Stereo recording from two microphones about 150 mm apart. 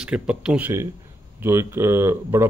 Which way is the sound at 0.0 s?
5° right (ahead or behind).